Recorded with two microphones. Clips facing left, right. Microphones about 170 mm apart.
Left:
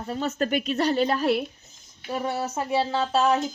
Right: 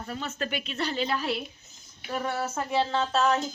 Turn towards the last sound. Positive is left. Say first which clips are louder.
# left 3 dB
turn(degrees=15)  # may be behind; listen again after turning